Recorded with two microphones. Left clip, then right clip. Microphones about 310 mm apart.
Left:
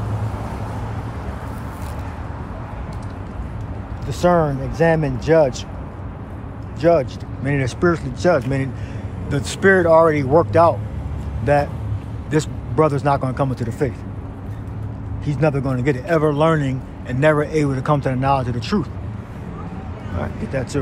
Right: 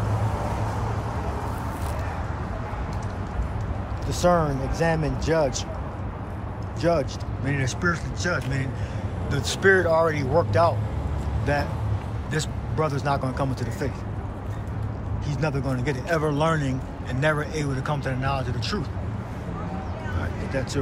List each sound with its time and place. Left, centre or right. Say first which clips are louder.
4.1 s speech: left 5 dB; left
6.8 s speech: left 8 dB; left
12.3 s a man's voice: left 9 dB; left
15.2 s speech: left 8 dB; left
20.2 s a sound: left 6 dB; left